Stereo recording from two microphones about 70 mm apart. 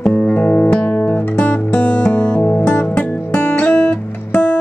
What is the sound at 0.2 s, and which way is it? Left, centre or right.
Music, left.